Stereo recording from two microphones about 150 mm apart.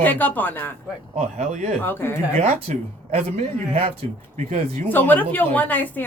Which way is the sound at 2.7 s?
50° right (ahead or behind).